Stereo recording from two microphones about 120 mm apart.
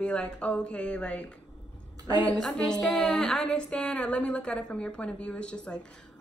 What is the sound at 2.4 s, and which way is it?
A woman's voice, 5° left (ahead or behind).